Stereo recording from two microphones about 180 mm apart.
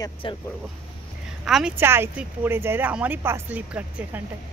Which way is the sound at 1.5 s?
5° right (ahead or behind).